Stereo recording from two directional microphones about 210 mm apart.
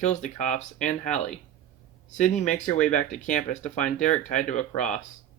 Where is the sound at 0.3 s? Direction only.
35° left (ahead or behind).